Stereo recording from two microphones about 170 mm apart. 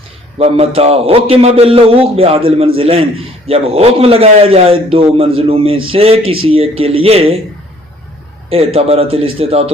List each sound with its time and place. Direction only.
0.3 s a man's voice: 35° right (ahead or behind)
8.4 s a man's voice: 35° right (ahead or behind)